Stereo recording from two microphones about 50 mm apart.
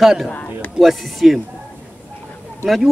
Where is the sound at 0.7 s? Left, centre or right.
Centre.